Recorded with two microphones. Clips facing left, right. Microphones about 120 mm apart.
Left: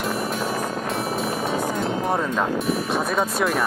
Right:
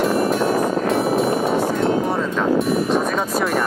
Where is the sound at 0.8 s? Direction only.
Centre (ahead or behind).